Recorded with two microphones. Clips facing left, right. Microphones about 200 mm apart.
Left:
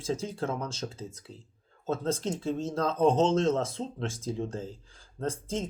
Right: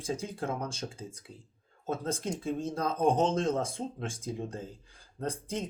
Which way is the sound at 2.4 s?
15° right (ahead or behind).